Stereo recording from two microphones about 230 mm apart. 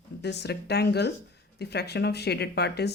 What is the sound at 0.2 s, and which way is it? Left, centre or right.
Speech, left.